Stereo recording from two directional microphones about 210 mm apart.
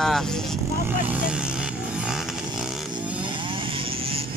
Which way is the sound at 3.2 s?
25° right (ahead or behind).